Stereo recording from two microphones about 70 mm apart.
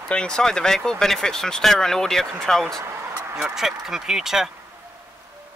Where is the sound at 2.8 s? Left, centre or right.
Right.